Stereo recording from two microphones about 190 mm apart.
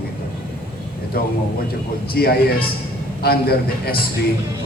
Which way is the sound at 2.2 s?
55° left (ahead or behind).